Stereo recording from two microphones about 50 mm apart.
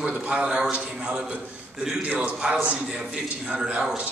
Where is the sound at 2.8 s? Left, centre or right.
Centre.